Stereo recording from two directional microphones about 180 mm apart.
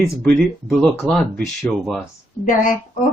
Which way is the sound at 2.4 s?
50° left (ahead or behind).